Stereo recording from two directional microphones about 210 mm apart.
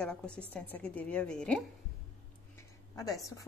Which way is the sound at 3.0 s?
15° left (ahead or behind).